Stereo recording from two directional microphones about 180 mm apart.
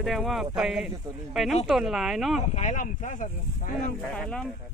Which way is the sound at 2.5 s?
45° left (ahead or behind).